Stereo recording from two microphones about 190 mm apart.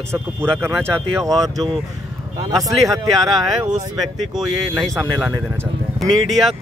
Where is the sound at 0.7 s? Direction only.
5° left (ahead or behind).